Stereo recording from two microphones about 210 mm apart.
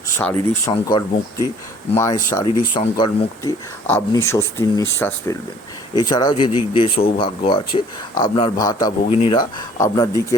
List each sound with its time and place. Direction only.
0.2 s speech: 10° left (ahead or behind)
0.7 s speech: 20° left (ahead or behind)
9.0 s speech: 30° left (ahead or behind)